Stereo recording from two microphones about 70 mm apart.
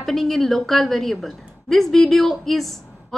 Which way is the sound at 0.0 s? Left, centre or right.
Centre.